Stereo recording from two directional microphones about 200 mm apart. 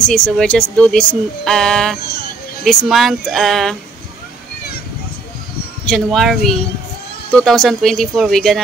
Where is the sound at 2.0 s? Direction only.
50° left (ahead or behind).